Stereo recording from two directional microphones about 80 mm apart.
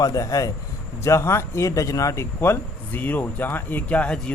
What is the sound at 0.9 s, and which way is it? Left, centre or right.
A man's voice, left.